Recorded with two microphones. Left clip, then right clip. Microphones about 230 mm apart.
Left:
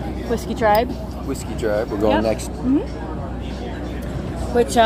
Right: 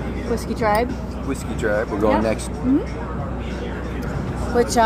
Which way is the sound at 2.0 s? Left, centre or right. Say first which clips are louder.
Left 1 dB; centre.